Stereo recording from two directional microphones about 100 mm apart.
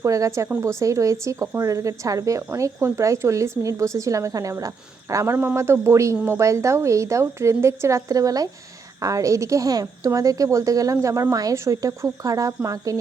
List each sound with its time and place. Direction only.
0.0 s speech: 30° right (ahead or behind)